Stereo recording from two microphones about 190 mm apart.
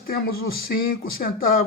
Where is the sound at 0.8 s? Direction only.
50° left (ahead or behind).